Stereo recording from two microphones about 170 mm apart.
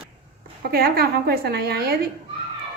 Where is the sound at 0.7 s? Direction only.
65° right (ahead or behind).